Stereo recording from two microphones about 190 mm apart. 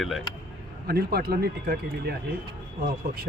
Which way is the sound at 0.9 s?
55° right (ahead or behind).